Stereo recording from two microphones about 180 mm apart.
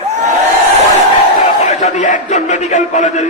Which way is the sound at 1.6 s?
40° left (ahead or behind).